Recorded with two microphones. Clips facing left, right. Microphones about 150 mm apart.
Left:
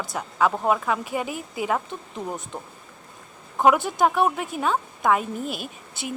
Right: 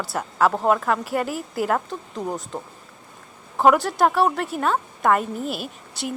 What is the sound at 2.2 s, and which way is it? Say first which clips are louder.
Speech: right 3 dB; 20° right (ahead or behind).